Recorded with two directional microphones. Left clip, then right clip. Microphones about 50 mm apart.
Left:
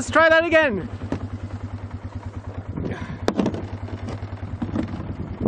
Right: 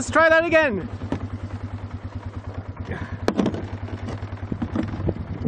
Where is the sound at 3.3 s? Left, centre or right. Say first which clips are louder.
Even; centre.